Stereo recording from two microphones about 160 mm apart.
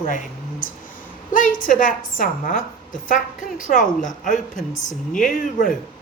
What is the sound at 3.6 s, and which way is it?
A woman's voice, 55° left (ahead or behind).